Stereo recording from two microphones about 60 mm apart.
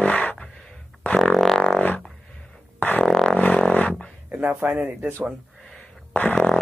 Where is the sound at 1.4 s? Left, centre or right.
Centre.